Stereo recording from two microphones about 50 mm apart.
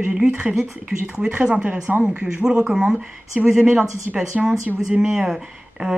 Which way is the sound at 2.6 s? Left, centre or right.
Centre.